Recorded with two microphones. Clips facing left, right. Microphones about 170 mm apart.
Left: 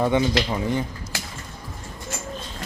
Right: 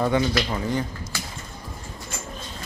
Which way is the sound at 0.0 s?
15° left (ahead or behind).